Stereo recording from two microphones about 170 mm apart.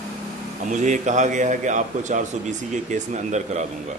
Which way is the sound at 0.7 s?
45° right (ahead or behind).